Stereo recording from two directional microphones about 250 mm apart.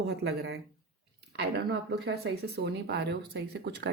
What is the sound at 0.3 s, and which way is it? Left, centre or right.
Speech, right.